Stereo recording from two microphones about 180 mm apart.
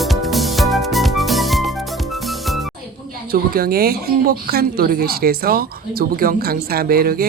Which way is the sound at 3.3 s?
55° right (ahead or behind).